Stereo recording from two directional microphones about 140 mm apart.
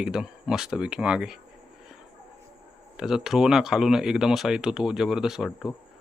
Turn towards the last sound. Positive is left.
turn(degrees=-5)  # may be behind; listen again after turning